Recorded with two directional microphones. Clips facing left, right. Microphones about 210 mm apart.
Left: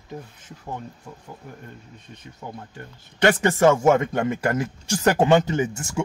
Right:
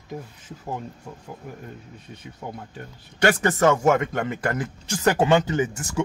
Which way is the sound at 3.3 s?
25° left (ahead or behind).